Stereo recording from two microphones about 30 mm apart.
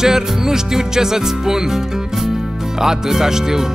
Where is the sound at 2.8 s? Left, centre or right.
Centre.